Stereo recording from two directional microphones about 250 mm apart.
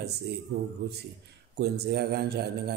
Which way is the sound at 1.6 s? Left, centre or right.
Right.